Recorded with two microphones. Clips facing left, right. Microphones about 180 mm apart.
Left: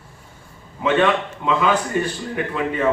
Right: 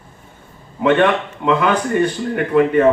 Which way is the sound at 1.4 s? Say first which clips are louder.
Right 3 dB; 60° right (ahead or behind).